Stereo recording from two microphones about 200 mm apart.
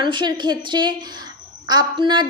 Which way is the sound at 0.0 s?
25° right (ahead or behind).